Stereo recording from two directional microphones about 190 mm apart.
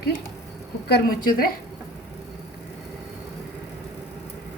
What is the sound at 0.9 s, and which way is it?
Speech, 55° left (ahead or behind).